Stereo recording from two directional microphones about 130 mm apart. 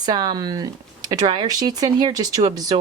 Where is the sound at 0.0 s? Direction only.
30° right (ahead or behind).